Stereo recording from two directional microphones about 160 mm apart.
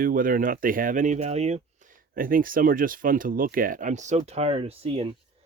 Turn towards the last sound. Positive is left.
turn(degrees=-35)  # may be behind; listen again after turning